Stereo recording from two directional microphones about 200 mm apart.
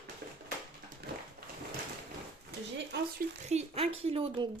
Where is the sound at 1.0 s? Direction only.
50° right (ahead or behind).